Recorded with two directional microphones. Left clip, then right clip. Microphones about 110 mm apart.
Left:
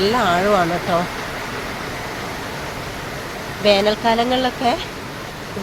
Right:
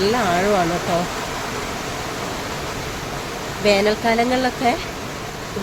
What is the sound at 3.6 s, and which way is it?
Speech, 5° right (ahead or behind).